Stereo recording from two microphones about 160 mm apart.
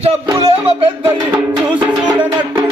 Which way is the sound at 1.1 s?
15° right (ahead or behind).